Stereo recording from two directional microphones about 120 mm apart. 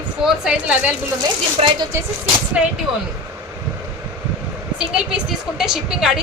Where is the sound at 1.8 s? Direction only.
25° right (ahead or behind).